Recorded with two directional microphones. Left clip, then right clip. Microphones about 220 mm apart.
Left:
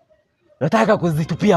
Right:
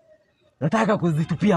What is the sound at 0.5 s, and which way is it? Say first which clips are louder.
Speech: left 6 dB; 25° left (ahead or behind).